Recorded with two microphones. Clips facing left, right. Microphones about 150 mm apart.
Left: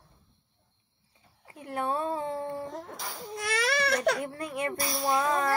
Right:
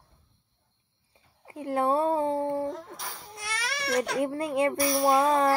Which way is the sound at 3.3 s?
55° left (ahead or behind).